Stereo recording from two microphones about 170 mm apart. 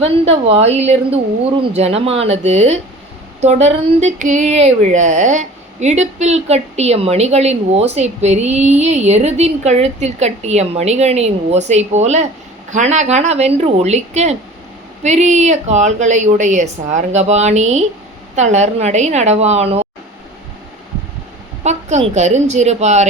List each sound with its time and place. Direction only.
0.0 s a woman's voice: 35° right (ahead or behind)
21.6 s speech: 40° right (ahead or behind)